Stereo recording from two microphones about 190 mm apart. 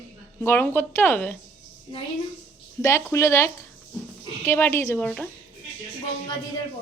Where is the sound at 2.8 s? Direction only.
15° left (ahead or behind).